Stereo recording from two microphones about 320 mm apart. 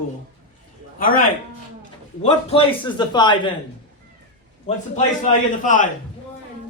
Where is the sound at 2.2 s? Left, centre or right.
Centre.